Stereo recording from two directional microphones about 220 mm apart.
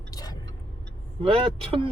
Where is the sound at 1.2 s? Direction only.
25° right (ahead or behind).